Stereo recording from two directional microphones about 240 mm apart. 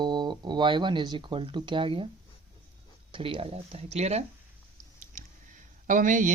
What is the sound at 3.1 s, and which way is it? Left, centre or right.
Speech, right.